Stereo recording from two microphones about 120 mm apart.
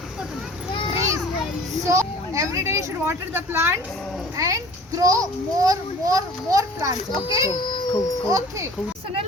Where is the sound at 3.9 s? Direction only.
Centre (ahead or behind).